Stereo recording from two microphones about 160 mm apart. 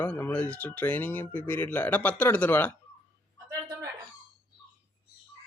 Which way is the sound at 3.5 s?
20° right (ahead or behind).